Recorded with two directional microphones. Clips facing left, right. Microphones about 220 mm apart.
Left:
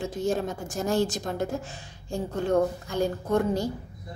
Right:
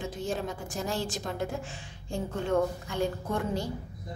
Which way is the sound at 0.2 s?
45° left (ahead or behind).